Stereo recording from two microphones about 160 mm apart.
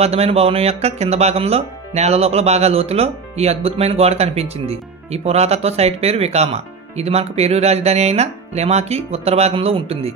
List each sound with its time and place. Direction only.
0.0 s speech: 40° right (ahead or behind)